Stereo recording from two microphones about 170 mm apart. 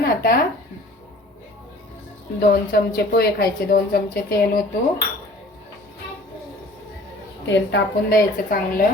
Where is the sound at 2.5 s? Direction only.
65° left (ahead or behind).